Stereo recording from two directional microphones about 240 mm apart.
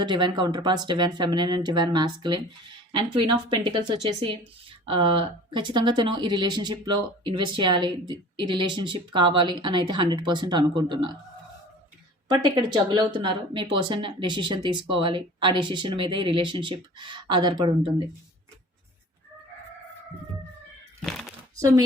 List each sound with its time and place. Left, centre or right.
0.0 s a woman's voice: centre
12.3 s a woman's voice: centre
21.0 s a sound: centre
21.6 s speech: centre